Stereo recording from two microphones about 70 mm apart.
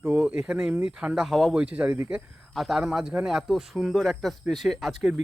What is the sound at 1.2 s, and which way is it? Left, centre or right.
Speech, centre.